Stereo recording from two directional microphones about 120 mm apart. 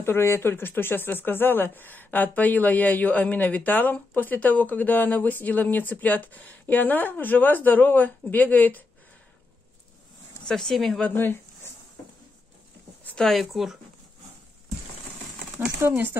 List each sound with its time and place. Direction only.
0.0 s speech: 20° left (ahead or behind)
10.5 s speech: 5° left (ahead or behind)
11.1 s speech: 15° left (ahead or behind)
13.0 s speech: 5° left (ahead or behind)
15.8 s speech: 20° right (ahead or behind)